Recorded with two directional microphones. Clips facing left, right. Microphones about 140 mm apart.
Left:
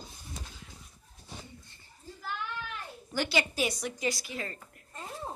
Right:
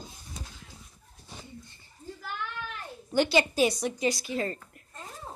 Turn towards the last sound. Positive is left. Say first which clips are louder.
# right 5 dB
turn(degrees=-20)  # may be behind; listen again after turning